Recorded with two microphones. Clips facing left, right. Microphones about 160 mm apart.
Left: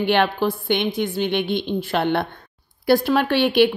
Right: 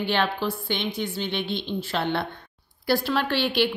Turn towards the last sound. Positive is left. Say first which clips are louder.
# left 7 dB
turn(degrees=55)  # may be behind; listen again after turning